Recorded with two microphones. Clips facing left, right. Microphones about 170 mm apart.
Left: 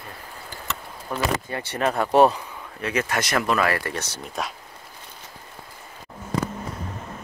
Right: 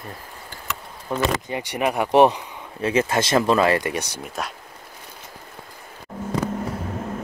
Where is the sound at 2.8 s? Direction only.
25° right (ahead or behind).